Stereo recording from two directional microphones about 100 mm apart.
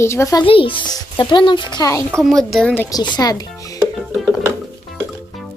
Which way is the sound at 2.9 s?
45° left (ahead or behind).